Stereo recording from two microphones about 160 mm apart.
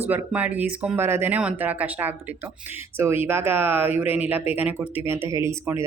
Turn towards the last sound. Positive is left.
turn(degrees=-20)  # may be behind; listen again after turning